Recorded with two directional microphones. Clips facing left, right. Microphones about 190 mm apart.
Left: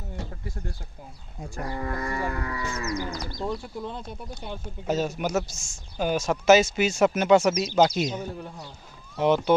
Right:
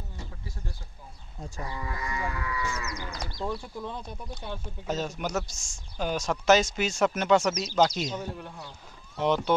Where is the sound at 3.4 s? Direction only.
15° left (ahead or behind).